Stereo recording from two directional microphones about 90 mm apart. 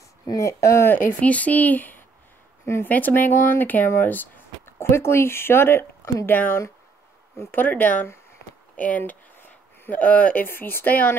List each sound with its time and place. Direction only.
0.3 s speech: 35° left (ahead or behind)